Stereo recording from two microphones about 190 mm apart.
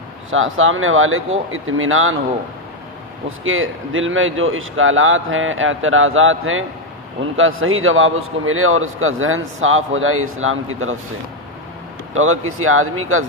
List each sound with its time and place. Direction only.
0.3 s a man's voice: 90° right
3.2 s a man's voice: 90° right
12.1 s a man's voice: 90° right